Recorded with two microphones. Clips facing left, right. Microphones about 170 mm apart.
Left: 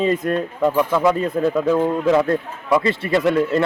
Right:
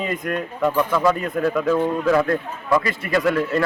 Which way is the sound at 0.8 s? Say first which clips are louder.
Left 2 dB; 20° left (ahead or behind).